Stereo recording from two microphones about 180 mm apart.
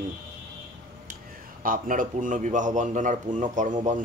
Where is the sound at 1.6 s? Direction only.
50° right (ahead or behind).